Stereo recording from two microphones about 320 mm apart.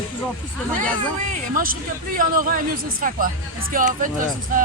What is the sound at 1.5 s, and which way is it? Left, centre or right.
Speech, right.